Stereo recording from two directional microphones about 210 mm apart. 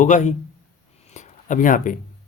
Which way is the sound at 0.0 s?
35° left (ahead or behind).